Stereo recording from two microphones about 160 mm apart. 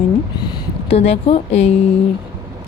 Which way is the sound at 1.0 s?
40° left (ahead or behind).